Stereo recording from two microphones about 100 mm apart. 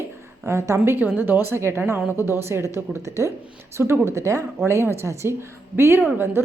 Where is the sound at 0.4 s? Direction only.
30° right (ahead or behind).